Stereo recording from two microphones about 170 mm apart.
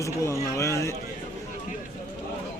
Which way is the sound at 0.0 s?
20° left (ahead or behind).